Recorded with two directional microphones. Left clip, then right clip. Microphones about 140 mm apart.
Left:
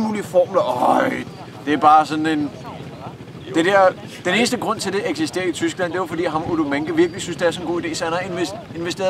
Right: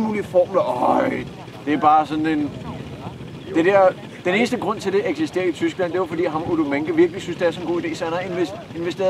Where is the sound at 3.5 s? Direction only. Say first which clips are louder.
Left 1 dB; 25° left (ahead or behind).